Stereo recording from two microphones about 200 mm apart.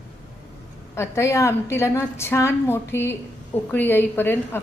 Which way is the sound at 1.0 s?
15° left (ahead or behind).